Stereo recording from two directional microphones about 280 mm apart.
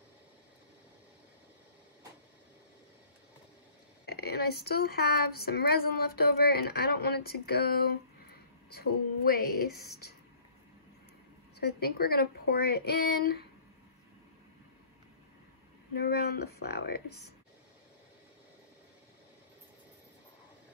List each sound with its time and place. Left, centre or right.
4.0 s speech: left
11.6 s speech: left
15.9 s speech: left